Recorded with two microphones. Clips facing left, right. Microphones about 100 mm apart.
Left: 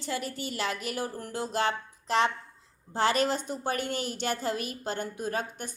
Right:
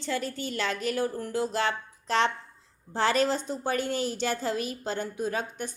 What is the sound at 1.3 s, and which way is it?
Speech, 20° left (ahead or behind).